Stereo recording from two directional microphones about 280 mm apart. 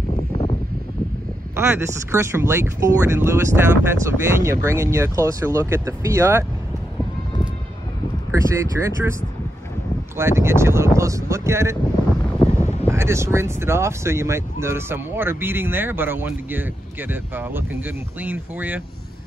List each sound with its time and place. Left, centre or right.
0.1 s a sound: left
1.5 s speech: centre
8.3 s speech: centre
10.1 s speech: centre